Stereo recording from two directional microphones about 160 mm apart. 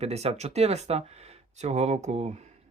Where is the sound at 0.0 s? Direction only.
40° right (ahead or behind).